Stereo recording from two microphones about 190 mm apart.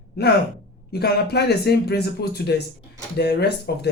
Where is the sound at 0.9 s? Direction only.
60° left (ahead or behind).